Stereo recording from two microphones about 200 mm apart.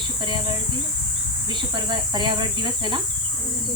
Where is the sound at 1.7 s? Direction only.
25° right (ahead or behind).